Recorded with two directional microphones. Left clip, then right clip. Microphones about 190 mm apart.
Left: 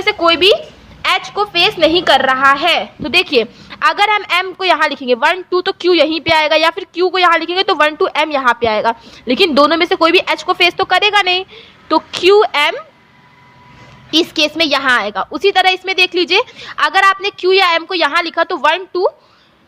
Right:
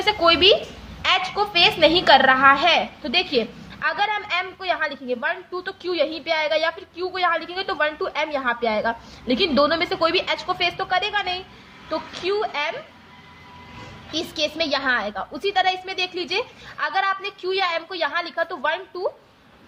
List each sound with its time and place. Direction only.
0.0 s a woman's voice: 35° left (ahead or behind)
14.1 s a woman's voice: 45° left (ahead or behind)